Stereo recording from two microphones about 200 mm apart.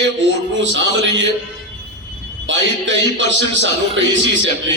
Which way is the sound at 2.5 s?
65° right (ahead or behind).